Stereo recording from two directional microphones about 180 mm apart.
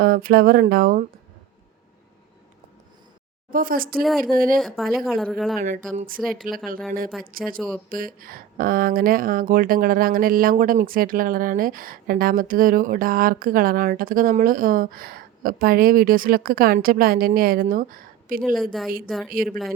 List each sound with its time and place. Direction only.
0.0 s a sound: 55° right (ahead or behind)
3.5 s speech: 50° right (ahead or behind)
4.6 s a woman's voice: centre (ahead or behind)
5.5 s speech: 45° right (ahead or behind)
18.5 s a woman's voice: centre (ahead or behind)
19.3 s speech: 50° right (ahead or behind)